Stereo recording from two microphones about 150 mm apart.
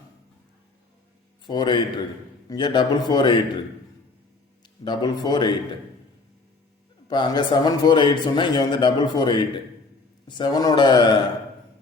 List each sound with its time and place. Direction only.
1.5 s a man's voice: 30° left (ahead or behind)
4.6 s a man's voice: 30° left (ahead or behind)
7.1 s a man's voice: 30° left (ahead or behind)